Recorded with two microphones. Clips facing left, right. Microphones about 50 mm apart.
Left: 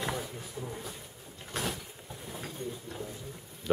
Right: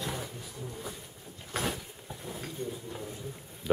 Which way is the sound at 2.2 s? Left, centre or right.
Centre.